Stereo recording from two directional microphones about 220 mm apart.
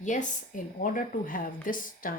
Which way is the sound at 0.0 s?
35° left (ahead or behind).